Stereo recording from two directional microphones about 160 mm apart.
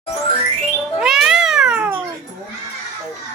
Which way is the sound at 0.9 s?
5° right (ahead or behind).